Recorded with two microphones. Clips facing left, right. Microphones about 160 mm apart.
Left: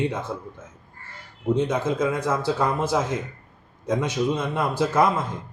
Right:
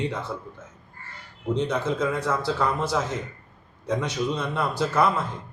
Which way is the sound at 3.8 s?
15° left (ahead or behind).